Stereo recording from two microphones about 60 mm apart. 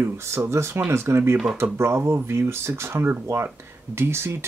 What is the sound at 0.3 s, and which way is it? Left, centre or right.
Speech, right.